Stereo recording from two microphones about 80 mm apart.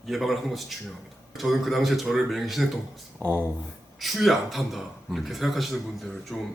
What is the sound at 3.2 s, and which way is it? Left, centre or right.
Speech, right.